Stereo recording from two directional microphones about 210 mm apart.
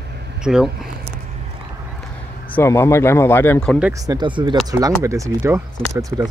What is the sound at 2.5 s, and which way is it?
Speech, 10° left (ahead or behind).